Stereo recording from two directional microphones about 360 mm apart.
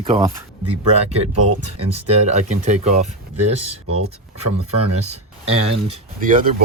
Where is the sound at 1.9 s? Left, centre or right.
Centre.